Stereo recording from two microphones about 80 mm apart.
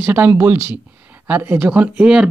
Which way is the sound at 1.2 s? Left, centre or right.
Right.